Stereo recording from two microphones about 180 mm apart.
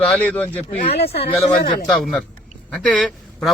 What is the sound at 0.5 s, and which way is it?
Speech, 35° left (ahead or behind).